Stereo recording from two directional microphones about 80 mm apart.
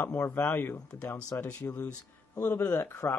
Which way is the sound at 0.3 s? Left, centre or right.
Left.